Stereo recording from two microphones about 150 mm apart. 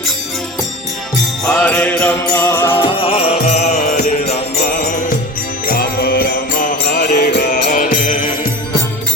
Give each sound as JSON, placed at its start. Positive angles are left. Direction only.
{"t": 1.5, "sound": "mantra", "side_deg": 10}
{"t": 2.3, "sound": "music", "side_deg": 15}
{"t": 2.7, "sound": "music", "side_deg": 35}
{"t": 4.7, "sound": "music", "side_deg": 65}
{"t": 5.6, "sound": "music", "side_deg": 80}
{"t": 7.7, "sound": "music", "side_deg": 60}